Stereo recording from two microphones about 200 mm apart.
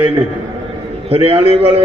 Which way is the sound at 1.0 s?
30° right (ahead or behind).